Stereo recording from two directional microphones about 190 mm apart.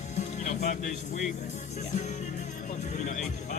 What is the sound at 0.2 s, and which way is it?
Music, 40° left (ahead or behind).